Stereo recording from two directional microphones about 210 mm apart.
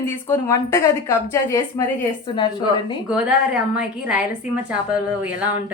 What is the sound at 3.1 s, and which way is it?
A woman's voice, 5° right (ahead or behind).